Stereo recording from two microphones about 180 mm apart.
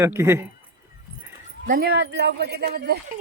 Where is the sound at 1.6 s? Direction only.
55° right (ahead or behind).